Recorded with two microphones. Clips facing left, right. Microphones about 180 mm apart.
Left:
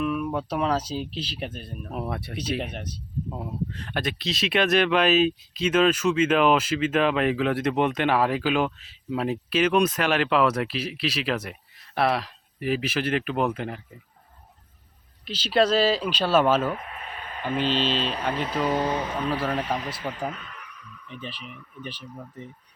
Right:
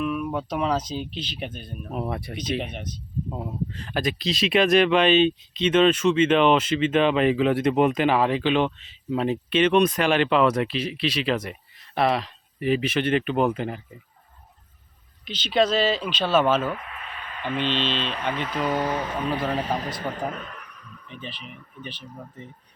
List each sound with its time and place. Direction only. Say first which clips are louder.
0.0 s speech: even; centre (ahead or behind)
15.4 s speech: left 1 dB; 5° left (ahead or behind)
16.7 s speech: left 1 dB; 40° left (ahead or behind); by 19.1 s 20° left (ahead or behind)
19.4 s speech: right 1 dB; centre (ahead or behind)
20.0 s a sound: right 2 dB; 45° right (ahead or behind)